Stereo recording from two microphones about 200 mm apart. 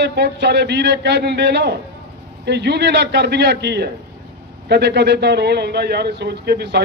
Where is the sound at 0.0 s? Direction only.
60° right (ahead or behind).